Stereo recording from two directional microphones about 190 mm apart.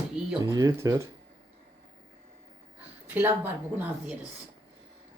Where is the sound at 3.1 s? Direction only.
10° right (ahead or behind).